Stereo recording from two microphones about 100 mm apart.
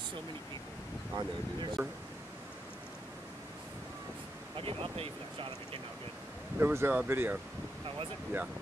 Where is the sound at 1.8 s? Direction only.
25° right (ahead or behind).